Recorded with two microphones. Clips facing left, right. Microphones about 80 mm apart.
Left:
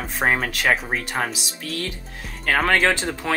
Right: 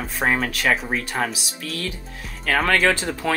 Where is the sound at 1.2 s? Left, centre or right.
Left.